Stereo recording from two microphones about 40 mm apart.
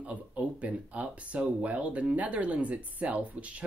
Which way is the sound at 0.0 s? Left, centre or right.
Right.